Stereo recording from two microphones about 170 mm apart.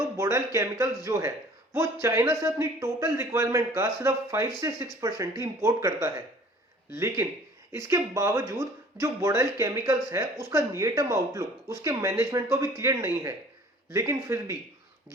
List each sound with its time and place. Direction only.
0.2 s speech: 15° right (ahead or behind)